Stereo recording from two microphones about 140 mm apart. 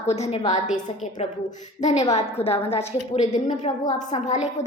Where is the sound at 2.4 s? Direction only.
45° left (ahead or behind).